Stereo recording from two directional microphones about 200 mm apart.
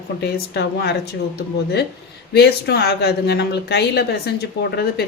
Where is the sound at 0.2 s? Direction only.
55° left (ahead or behind).